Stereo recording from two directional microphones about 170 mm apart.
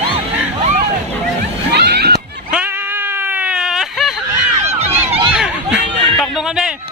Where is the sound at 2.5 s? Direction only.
10° right (ahead or behind).